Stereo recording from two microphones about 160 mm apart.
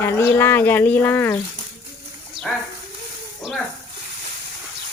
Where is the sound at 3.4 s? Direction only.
Centre (ahead or behind).